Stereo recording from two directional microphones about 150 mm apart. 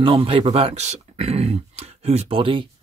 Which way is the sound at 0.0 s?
35° right (ahead or behind).